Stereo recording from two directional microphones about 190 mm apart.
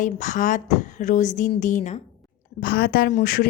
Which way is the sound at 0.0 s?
40° left (ahead or behind).